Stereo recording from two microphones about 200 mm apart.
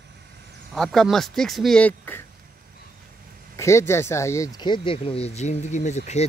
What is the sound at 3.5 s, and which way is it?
Speech, 15° left (ahead or behind).